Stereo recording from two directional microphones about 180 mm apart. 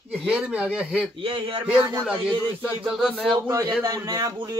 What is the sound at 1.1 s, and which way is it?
Speech, 30° right (ahead or behind).